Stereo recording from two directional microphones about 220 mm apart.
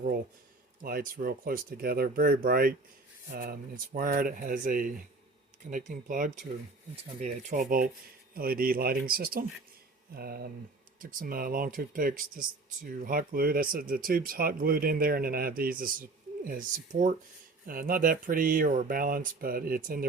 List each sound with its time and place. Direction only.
0.8 s speech: 40° right (ahead or behind)